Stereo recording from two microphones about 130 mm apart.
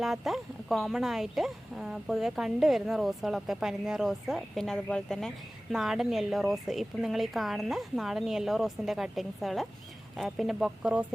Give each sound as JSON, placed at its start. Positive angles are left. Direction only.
{"t": 0.0, "sound": "speech", "side_deg": 0}